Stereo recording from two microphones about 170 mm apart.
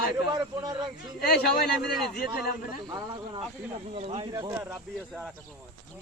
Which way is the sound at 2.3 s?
65° left (ahead or behind).